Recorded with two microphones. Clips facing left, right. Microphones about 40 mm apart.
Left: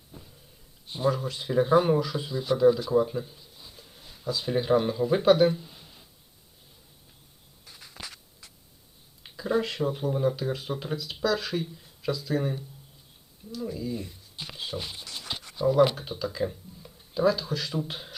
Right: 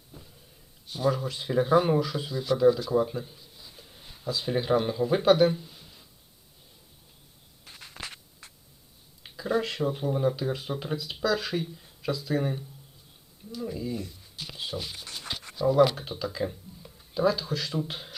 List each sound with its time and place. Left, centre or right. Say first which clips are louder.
0.1 s a sound: left 1 dB; centre
1.1 s speech: left 1 dB; centre
2.6 s speech: left 1 dB; centre
2.9 s speech: left 2 dB; centre
7.6 s a sound: right 2 dB; right
9.2 s speech: left 1 dB; centre
14.0 s shuffling cards: even; left
14.4 s speech: even; centre
15.0 s a sound: even; right
15.6 s speech: even; centre
16.0 s speech: left 1 dB; centre